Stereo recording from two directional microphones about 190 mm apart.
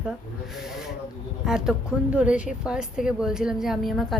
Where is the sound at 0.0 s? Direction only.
Centre (ahead or behind).